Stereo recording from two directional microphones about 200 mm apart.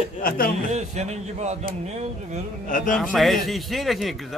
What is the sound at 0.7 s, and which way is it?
Speech, 35° right (ahead or behind).